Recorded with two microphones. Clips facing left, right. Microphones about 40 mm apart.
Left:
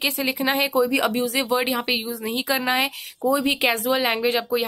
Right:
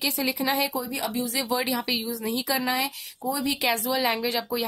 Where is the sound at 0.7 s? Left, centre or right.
Left.